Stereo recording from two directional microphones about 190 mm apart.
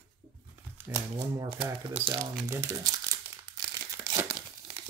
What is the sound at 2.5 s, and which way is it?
Speech, 15° right (ahead or behind).